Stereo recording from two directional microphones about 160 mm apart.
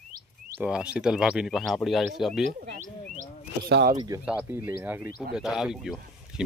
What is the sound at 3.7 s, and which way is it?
Speech, 90° right.